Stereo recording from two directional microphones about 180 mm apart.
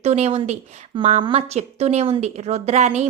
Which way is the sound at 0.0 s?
40° right (ahead or behind).